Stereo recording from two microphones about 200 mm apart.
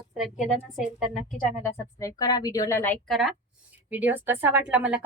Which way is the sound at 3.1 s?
Centre (ahead or behind).